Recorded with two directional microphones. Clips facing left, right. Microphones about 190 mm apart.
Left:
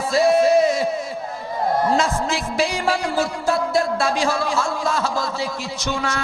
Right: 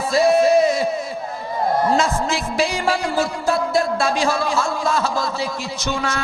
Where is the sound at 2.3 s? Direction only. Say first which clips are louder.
Right 1 dB; 10° right (ahead or behind).